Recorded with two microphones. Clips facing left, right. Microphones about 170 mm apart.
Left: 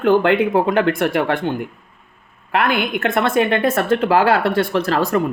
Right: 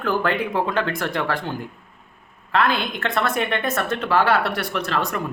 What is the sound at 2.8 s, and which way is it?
Speech, 25° left (ahead or behind).